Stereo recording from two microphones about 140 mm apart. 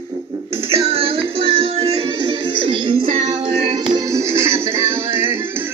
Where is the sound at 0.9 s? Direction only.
40° right (ahead or behind).